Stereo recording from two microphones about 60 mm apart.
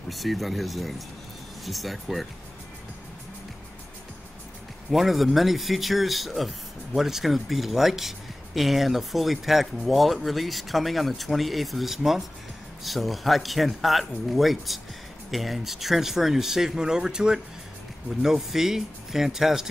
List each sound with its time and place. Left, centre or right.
0.1 s speech: centre
4.9 s speech: centre